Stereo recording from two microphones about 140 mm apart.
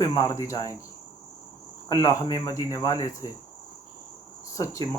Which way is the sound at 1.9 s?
25° left (ahead or behind).